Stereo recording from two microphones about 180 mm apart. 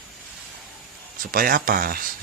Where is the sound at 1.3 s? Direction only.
50° right (ahead or behind).